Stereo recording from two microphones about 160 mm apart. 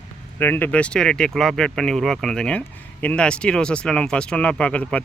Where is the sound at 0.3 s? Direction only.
15° left (ahead or behind).